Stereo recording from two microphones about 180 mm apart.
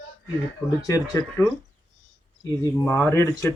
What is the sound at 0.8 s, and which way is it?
Speech, 20° left (ahead or behind).